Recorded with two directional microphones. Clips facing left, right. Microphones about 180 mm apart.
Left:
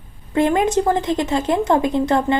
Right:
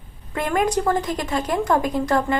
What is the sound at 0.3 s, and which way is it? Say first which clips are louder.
A woman's voice: left 5 dB; 25° left (ahead or behind).